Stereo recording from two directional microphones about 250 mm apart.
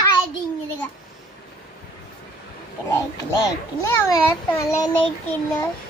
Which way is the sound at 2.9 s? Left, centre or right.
Centre.